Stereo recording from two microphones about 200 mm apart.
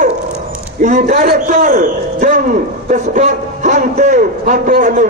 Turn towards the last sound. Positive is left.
turn(degrees=-40)  # may be behind; listen again after turning